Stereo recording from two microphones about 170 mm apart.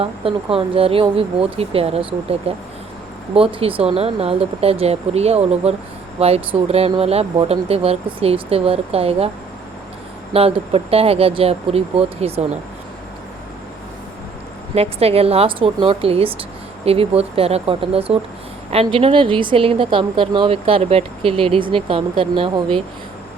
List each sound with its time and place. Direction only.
0.0 s speech: 35° right (ahead or behind)
10.3 s speech: 35° right (ahead or behind)
14.8 s speech: 35° right (ahead or behind)